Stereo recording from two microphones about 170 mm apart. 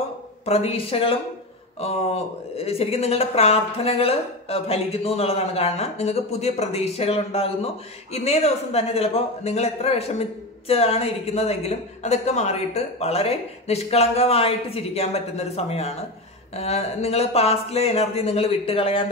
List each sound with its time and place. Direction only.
0.5 s speech: 35° left (ahead or behind)